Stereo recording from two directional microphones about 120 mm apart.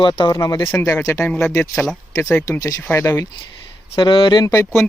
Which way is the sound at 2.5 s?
25° left (ahead or behind).